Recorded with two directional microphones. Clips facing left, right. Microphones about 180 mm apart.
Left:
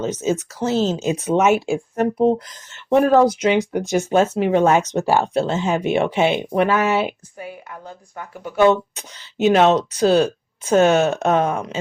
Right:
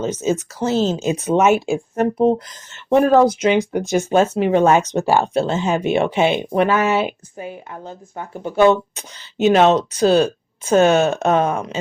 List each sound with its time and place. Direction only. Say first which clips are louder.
0.0 s speech: right 1 dB; 30° right (ahead or behind)